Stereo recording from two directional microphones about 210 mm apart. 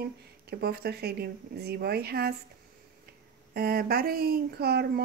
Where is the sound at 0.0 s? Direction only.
50° right (ahead or behind).